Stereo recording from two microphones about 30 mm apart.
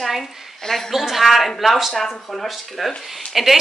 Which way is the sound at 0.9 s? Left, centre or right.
Centre.